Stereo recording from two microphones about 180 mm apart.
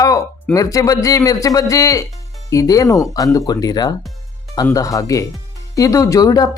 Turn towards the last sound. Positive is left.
turn(degrees=20)  # may be behind; listen again after turning